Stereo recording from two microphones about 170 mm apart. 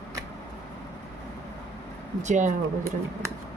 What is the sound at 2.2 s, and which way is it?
Speech, 45° right (ahead or behind).